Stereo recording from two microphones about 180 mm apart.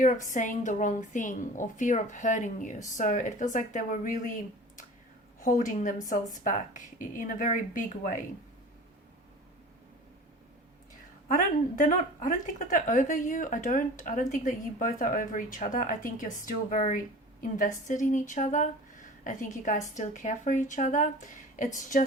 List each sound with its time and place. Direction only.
0.0 s a woman's voice: 45° left (ahead or behind)
5.4 s a woman's voice: 50° left (ahead or behind)
11.3 s a woman's voice: 50° left (ahead or behind)